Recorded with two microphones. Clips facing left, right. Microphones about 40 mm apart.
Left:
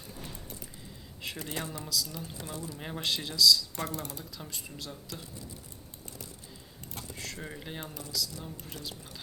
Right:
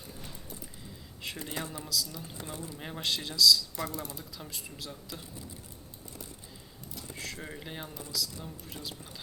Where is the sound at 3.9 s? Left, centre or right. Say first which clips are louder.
Left 1 dB; left.